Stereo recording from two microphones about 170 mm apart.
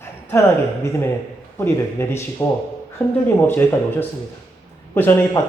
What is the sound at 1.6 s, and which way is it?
Speech, 15° left (ahead or behind).